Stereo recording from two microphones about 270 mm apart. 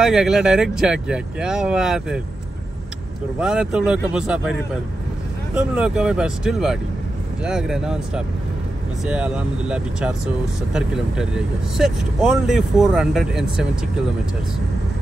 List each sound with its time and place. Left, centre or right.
0.0 s speech: centre
3.3 s speech: centre